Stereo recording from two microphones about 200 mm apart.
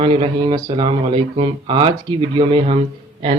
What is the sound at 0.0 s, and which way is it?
A man's voice, 25° right (ahead or behind).